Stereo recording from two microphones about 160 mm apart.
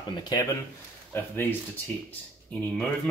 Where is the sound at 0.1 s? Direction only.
25° left (ahead or behind).